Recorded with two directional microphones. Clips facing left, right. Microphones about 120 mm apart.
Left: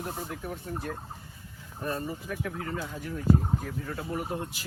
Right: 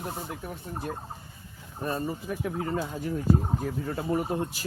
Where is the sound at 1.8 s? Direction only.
25° right (ahead or behind).